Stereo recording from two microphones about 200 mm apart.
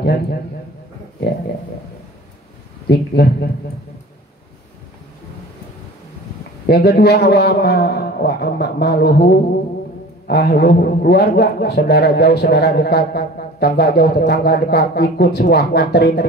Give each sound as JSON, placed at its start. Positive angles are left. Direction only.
{"t": 0.0, "sound": "a man's voice", "side_deg": 55}
{"t": 2.9, "sound": "a man's voice", "side_deg": 50}
{"t": 6.6, "sound": "a man's voice", "side_deg": 50}